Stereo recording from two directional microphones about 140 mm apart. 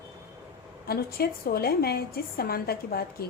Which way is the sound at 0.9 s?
90° left.